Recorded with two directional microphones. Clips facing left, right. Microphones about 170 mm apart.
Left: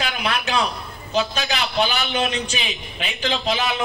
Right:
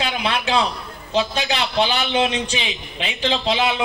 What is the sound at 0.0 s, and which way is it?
A man's voice, 25° right (ahead or behind).